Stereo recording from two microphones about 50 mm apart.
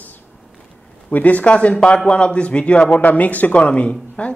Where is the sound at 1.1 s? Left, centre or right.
Left.